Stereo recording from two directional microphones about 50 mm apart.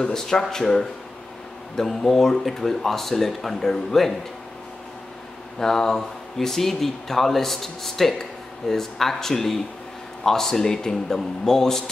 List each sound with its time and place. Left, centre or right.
0.0 s speech: centre
5.6 s speech: centre